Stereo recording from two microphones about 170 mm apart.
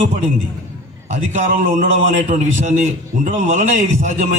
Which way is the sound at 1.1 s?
45° right (ahead or behind).